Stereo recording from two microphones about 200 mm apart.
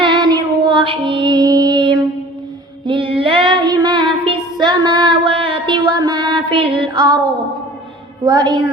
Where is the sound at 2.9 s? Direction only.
25° right (ahead or behind).